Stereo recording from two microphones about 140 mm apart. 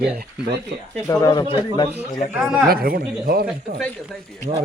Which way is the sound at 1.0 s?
25° left (ahead or behind).